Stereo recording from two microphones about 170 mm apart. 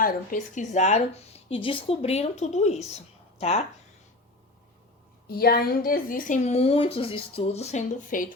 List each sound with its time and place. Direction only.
0.0 s speech: 55° left (ahead or behind); by 3.6 s 40° left (ahead or behind)
5.3 s a woman's voice: 60° left (ahead or behind)